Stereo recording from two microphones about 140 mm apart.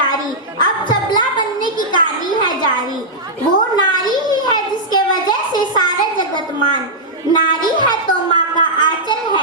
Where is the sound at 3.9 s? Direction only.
30° left (ahead or behind).